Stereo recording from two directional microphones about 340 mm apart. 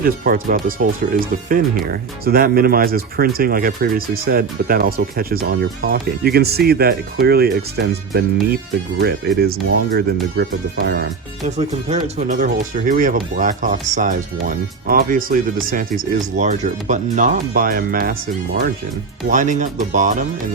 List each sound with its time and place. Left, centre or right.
0.0 s speech: right